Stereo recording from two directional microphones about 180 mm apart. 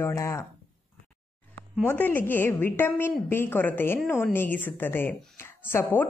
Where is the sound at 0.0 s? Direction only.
15° left (ahead or behind).